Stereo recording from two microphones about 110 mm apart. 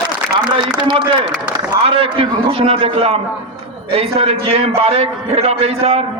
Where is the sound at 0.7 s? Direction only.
40° right (ahead or behind).